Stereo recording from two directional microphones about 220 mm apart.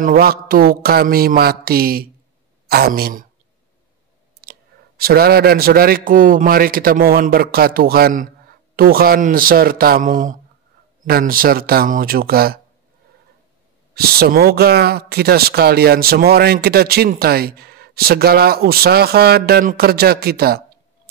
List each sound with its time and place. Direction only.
0.0 s speech: 40° right (ahead or behind)
4.4 s speech: 45° right (ahead or behind)
13.9 s speech: 45° right (ahead or behind)